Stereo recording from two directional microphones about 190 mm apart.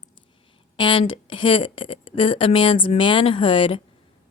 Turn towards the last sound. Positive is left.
turn(degrees=30)  # may be behind; listen again after turning